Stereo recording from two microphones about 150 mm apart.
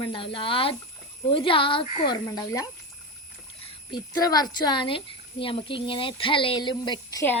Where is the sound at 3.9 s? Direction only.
25° left (ahead or behind).